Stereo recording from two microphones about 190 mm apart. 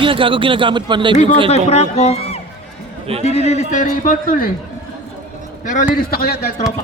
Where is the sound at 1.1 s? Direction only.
40° left (ahead or behind).